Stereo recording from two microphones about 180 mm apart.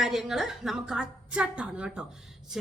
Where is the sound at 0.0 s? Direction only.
Centre (ahead or behind).